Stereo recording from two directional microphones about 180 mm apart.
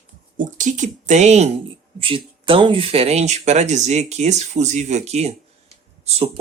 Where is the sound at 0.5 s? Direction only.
45° right (ahead or behind).